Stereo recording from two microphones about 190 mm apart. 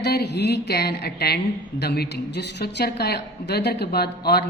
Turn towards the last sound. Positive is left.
turn(degrees=55)  # may be behind; listen again after turning